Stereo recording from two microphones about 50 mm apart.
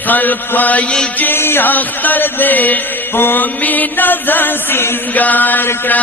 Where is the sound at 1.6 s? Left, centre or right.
Left.